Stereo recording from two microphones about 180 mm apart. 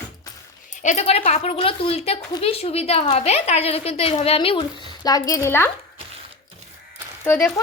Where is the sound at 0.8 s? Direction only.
40° left (ahead or behind); by 5.7 s 15° left (ahead or behind).